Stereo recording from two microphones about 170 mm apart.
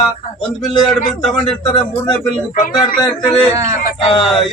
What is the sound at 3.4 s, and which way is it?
Speech, 15° right (ahead or behind).